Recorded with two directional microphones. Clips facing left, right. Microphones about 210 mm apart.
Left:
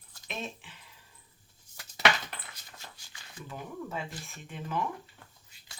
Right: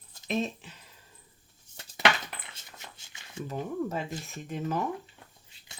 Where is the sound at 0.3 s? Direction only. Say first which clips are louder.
Right 9 dB; 40° right (ahead or behind).